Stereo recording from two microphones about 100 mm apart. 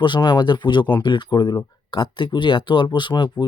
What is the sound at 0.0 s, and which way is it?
Speech, 50° left (ahead or behind).